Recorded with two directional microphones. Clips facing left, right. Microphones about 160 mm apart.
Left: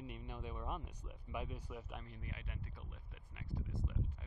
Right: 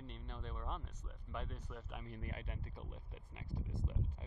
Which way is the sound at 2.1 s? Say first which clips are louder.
Right 4 dB; 50° right (ahead or behind).